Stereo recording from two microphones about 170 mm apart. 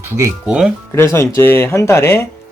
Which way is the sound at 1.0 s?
15° left (ahead or behind).